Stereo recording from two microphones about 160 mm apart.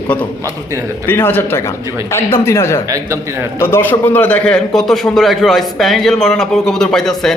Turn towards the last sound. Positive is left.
turn(degrees=5)  # may be behind; listen again after turning